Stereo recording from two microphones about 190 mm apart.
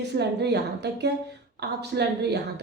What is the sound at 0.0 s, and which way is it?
A woman's voice, 60° right (ahead or behind).